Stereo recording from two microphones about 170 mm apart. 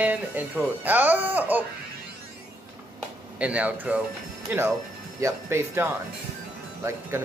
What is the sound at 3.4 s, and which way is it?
Speech, 5° right (ahead or behind).